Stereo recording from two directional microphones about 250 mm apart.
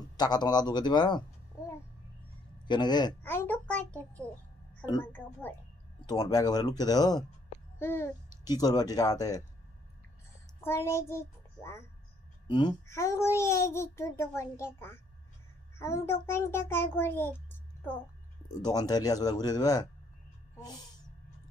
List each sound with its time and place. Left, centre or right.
0.2 s a child's voice: centre
1.5 s babbling: centre
2.6 s a child's voice: centre
10.6 s a child's voice: centre